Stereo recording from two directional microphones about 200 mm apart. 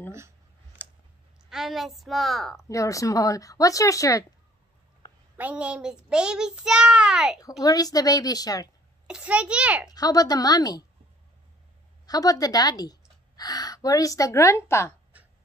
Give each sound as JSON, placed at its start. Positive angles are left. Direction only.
{"t": 1.5, "sound": "a child's voice", "side_deg": 0}
{"t": 2.7, "sound": "speech", "side_deg": 15}
{"t": 5.4, "sound": "a child's voice", "side_deg": -5}
{"t": 7.6, "sound": "a woman's voice", "side_deg": 20}
{"t": 9.0, "sound": "a child's voice", "side_deg": -5}
{"t": 9.8, "sound": "a woman's voice", "side_deg": 20}
{"t": 12.1, "sound": "a woman's voice", "side_deg": 20}